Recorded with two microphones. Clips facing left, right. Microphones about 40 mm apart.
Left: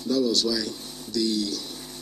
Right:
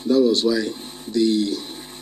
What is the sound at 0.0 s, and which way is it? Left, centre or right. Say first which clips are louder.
Speech: right 7 dB; right.